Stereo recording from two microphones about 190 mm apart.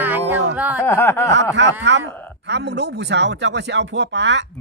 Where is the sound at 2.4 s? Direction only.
65° right (ahead or behind).